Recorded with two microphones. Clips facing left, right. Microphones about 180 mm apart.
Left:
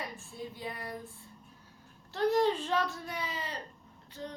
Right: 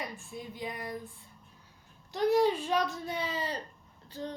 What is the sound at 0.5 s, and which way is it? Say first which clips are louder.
Speech: right 5 dB; 15° right (ahead or behind).